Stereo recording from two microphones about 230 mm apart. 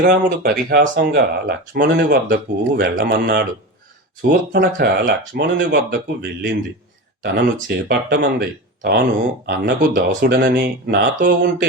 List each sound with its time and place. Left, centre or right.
0.0 s speech: right
7.7 s speech: right